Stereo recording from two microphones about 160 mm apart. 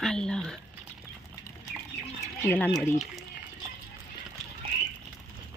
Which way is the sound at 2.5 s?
5° left (ahead or behind).